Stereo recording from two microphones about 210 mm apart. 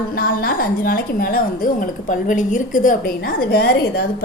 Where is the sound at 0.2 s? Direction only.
45° left (ahead or behind).